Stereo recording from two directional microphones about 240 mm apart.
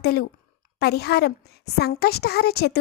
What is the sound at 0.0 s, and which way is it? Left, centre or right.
A woman's voice, left.